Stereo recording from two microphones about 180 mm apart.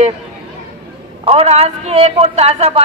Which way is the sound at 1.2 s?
35° right (ahead or behind).